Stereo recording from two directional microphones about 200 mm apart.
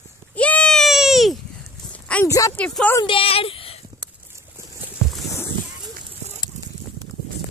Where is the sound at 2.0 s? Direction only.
10° left (ahead or behind).